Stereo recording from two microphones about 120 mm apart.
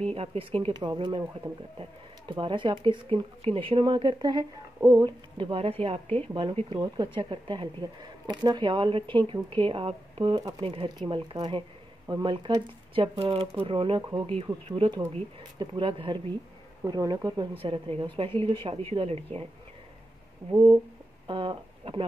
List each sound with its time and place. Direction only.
0.1 s speech: 50° right (ahead or behind); by 5.1 s 30° right (ahead or behind)
5.4 s speech: 50° right (ahead or behind)
6.8 s speech: 40° right (ahead or behind)
15.6 s speech: 45° right (ahead or behind)
16.8 s speech: 30° right (ahead or behind)
17.6 s speech: 50° right (ahead or behind)
20.5 s speech: 30° right (ahead or behind)
21.3 s speech: 45° right (ahead or behind)